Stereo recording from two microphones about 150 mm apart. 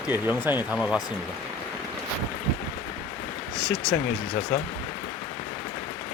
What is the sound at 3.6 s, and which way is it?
Speech, centre (ahead or behind).